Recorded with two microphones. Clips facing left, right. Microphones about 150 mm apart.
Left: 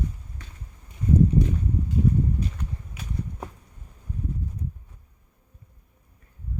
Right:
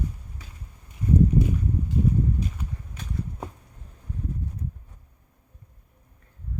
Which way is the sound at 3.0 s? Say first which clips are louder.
Right 1 dB; 5° left (ahead or behind).